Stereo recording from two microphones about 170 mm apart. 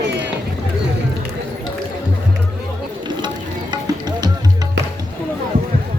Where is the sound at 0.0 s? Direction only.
90° right.